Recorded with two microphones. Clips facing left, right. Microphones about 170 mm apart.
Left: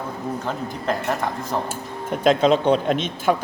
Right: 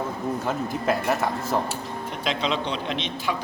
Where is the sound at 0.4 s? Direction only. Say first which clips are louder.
Right 1 dB; 5° right (ahead or behind).